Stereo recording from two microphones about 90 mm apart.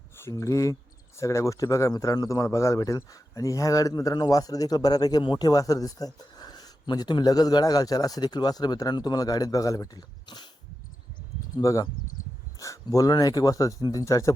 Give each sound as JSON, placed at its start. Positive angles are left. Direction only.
{"t": 0.2, "sound": "a man's voice", "side_deg": 35}
{"t": 11.5, "sound": "a man's voice", "side_deg": 40}